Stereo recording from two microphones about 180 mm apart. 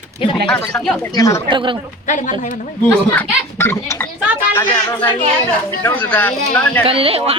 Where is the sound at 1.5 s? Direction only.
25° right (ahead or behind).